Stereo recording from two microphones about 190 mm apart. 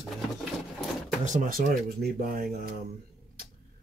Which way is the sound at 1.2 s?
40° right (ahead or behind).